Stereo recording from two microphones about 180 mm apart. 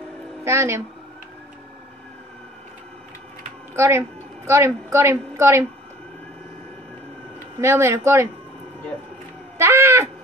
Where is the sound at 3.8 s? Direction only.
15° right (ahead or behind).